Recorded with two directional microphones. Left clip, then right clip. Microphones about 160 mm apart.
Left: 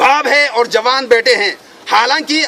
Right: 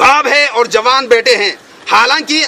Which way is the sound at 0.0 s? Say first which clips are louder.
Right 2 dB; centre (ahead or behind).